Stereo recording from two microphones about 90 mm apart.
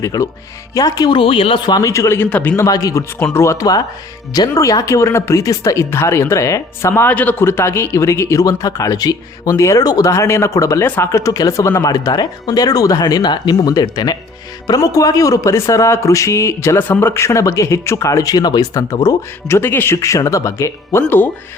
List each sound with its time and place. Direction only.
0.0 s a man's voice: 40° left (ahead or behind)
1.1 s speech: 90° left
1.6 s speech: 50° left (ahead or behind)
1.9 s a man's voice: 30° left (ahead or behind)
2.3 s a man's voice: 15° left (ahead or behind)
2.6 s a man's voice: 40° left (ahead or behind)
7.1 s a man's voice: 15° left (ahead or behind); by 10.1 s 45° left (ahead or behind)
10.1 s a man's voice: 30° left (ahead or behind)
10.8 s a man's voice: 25° left (ahead or behind)